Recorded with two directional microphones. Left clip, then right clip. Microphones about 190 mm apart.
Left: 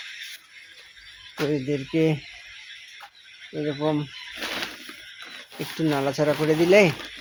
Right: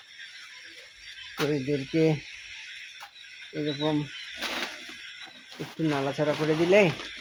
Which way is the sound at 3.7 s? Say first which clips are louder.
Left 3 dB; 25° left (ahead or behind).